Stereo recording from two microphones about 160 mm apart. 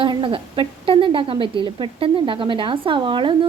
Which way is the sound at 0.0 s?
30° right (ahead or behind).